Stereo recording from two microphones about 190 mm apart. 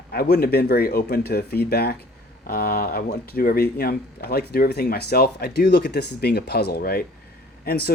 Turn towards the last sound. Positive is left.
turn(degrees=55)  # may be behind; listen again after turning